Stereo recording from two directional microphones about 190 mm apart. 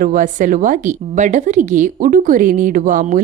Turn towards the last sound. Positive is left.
turn(degrees=-45)  # may be behind; listen again after turning